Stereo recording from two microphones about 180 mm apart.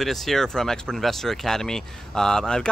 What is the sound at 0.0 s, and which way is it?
Speech, centre (ahead or behind).